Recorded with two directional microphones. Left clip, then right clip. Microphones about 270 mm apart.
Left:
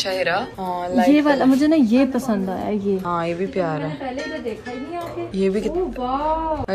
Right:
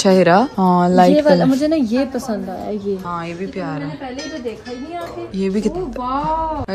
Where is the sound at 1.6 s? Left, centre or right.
Centre.